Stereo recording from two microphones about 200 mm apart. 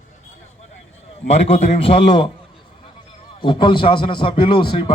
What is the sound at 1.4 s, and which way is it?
Speech, 30° left (ahead or behind).